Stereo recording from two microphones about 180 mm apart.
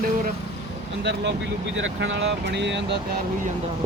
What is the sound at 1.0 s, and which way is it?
Speech, 70° right (ahead or behind).